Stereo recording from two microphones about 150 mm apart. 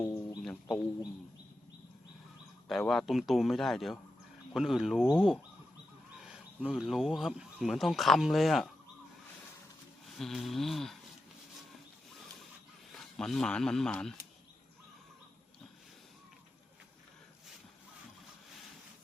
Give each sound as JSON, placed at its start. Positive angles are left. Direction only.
{"t": 0.0, "sound": "a sound", "side_deg": 20}
{"t": 2.6, "sound": "speech", "side_deg": 0}
{"t": 6.1, "sound": "a sound", "side_deg": -5}
{"t": 6.7, "sound": "speech", "side_deg": -5}
{"t": 10.2, "sound": "speech", "side_deg": 0}
{"t": 12.9, "sound": "speech", "side_deg": 5}